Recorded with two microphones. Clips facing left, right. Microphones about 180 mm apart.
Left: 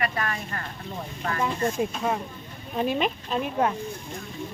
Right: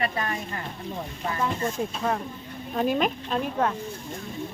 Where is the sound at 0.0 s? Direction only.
20° right (ahead or behind).